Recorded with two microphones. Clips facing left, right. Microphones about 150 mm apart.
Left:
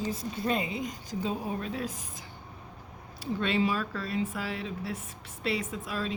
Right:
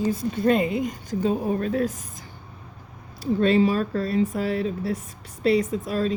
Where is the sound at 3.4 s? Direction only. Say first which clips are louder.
Right 9 dB; 40° right (ahead or behind).